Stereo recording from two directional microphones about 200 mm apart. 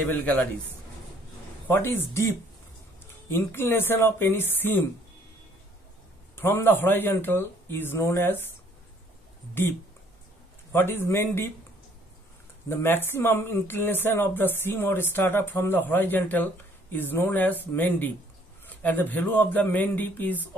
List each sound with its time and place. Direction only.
0.1 s speech: 10° left (ahead or behind)
1.7 s speech: 10° left (ahead or behind)
3.3 s speech: 10° left (ahead or behind)
6.3 s speech: 10° left (ahead or behind)
9.5 s speech: 10° left (ahead or behind)
12.6 s speech: 10° left (ahead or behind)